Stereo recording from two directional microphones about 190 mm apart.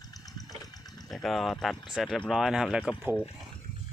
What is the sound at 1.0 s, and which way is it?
Speech, centre (ahead or behind).